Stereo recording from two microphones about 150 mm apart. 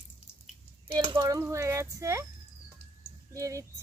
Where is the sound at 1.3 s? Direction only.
20° right (ahead or behind).